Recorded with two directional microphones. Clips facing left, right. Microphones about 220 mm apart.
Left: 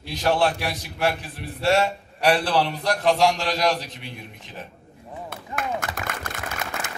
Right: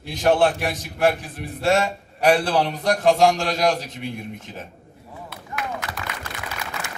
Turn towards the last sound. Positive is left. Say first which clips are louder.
# left 1 dB
turn(degrees=50)  # may be behind; listen again after turning